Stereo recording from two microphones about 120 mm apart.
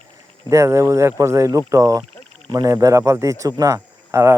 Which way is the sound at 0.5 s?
25° right (ahead or behind).